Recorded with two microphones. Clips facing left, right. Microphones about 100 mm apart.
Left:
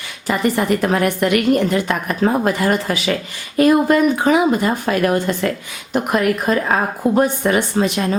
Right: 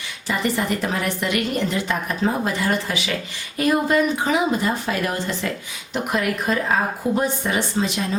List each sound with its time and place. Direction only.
0.3 s a woman's voice: 55° left (ahead or behind)